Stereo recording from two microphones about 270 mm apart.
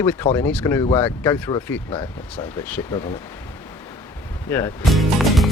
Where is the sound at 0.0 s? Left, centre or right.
Centre.